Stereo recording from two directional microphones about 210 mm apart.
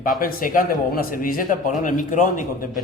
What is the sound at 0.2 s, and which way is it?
A man's voice, 40° left (ahead or behind).